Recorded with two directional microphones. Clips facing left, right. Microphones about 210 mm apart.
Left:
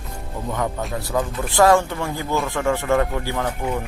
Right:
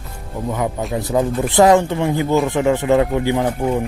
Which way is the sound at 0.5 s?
5° right (ahead or behind).